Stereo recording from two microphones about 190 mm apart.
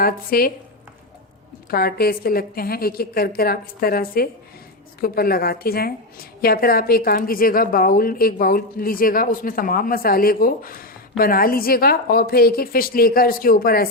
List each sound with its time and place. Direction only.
0.0 s a woman's voice: 50° left (ahead or behind)
1.7 s a woman's voice: 55° left (ahead or behind)